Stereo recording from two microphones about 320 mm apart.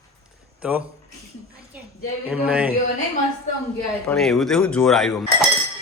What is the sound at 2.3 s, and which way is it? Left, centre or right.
Speech, centre.